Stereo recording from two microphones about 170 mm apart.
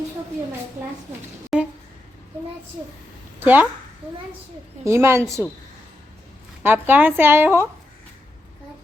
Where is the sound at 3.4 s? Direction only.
10° right (ahead or behind).